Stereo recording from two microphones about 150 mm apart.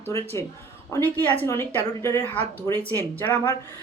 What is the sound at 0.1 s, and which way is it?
A man's voice, 20° left (ahead or behind).